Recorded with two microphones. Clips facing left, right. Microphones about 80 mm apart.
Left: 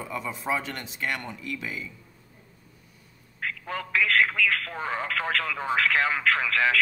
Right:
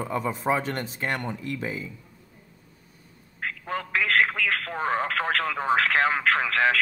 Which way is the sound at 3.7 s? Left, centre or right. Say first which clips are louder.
Even; right.